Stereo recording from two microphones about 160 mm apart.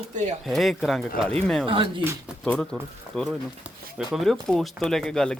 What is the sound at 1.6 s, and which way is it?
Speech, 35° right (ahead or behind).